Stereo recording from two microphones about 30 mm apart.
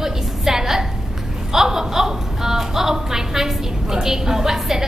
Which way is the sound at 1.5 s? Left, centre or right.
Centre.